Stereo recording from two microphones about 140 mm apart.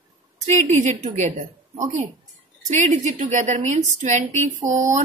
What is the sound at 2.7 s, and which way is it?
A woman's voice, 65° right (ahead or behind).